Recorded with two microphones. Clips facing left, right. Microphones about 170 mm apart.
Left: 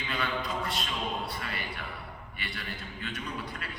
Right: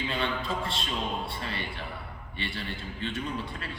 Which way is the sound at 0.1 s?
25° right (ahead or behind).